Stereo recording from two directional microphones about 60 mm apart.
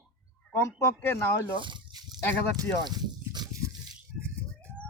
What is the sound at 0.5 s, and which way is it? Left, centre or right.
Speech, left.